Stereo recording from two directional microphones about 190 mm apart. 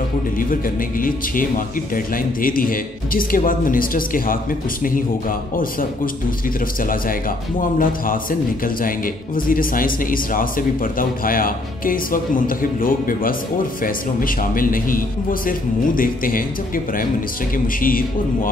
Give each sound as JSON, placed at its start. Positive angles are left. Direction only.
{"t": 0.4, "sound": "a man's voice", "side_deg": 45}
{"t": 6.8, "sound": "a man's voice", "side_deg": 45}